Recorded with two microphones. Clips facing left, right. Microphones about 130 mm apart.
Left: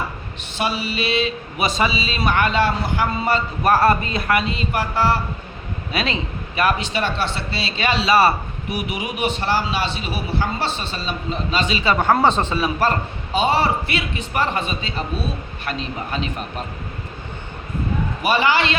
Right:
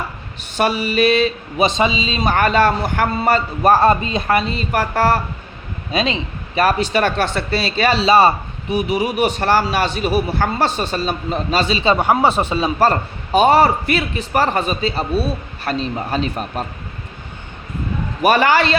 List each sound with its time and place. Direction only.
0.5 s a man's voice: 50° right (ahead or behind)
1.5 s a man's voice: 25° right (ahead or behind)
2.2 s a man's voice: 40° right (ahead or behind)
3.7 s a man's voice: 25° right (ahead or behind); by 5.2 s 50° right (ahead or behind)
5.9 s a man's voice: 25° right (ahead or behind)
6.6 s a man's voice: 40° right (ahead or behind)
10.3 s a man's voice: 55° right (ahead or behind); by 11.9 s 30° right (ahead or behind)
12.1 s speech: 10° right (ahead or behind)
12.6 s a man's voice: 35° right (ahead or behind)
18.2 s a man's voice: 50° right (ahead or behind)